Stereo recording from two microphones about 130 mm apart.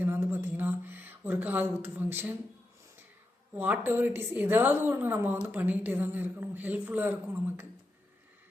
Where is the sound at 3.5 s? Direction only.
15° right (ahead or behind).